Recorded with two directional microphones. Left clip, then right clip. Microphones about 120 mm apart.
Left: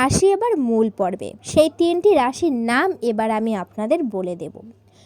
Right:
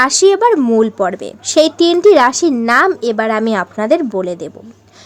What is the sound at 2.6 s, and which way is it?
Speech, 30° left (ahead or behind).